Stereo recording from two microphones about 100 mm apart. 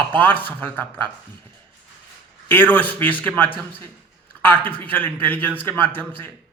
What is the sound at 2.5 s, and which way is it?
A man's voice, 15° left (ahead or behind).